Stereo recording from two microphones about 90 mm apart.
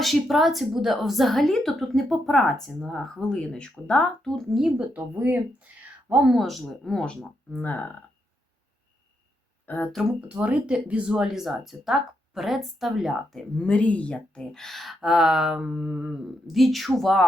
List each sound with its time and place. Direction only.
0.0 s a woman's voice: centre (ahead or behind)
4.9 s speech: 20° right (ahead or behind)
6.2 s a woman's voice: centre (ahead or behind); by 7.9 s 20° left (ahead or behind)
9.6 s speech: 15° left (ahead or behind)
10.1 s a woman's voice: 15° right (ahead or behind); by 13.4 s centre (ahead or behind)
13.6 s a woman's voice: 10° left (ahead or behind)